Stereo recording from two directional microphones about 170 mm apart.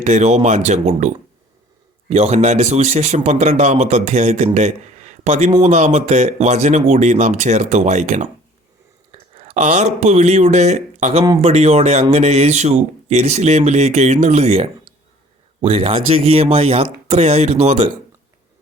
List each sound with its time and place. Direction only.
0.0 s a man's voice: 45° right (ahead or behind)
9.4 s a man's voice: 40° right (ahead or behind)